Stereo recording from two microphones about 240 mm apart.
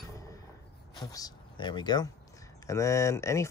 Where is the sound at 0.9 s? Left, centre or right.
Centre.